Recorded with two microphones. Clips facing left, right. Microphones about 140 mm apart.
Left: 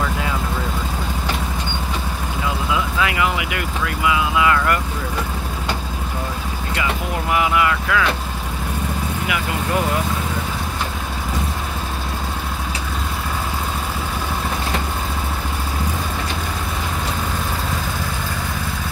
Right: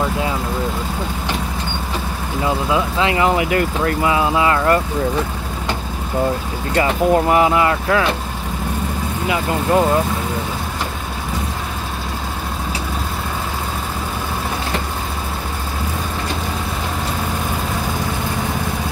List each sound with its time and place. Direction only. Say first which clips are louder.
2.4 s speech: right 5 dB; 30° right (ahead or behind)
6.7 s speech: right 10 dB; 40° right (ahead or behind)
9.3 s speech: right 7 dB; 30° right (ahead or behind)